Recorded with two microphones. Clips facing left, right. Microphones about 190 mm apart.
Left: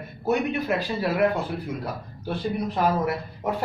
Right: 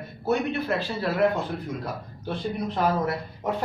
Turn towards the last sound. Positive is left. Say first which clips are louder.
# left 1 dB
turn(degrees=10)  # may be behind; listen again after turning